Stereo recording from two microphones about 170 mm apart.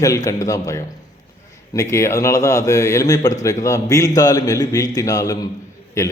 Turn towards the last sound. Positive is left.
turn(degrees=20)  # may be behind; listen again after turning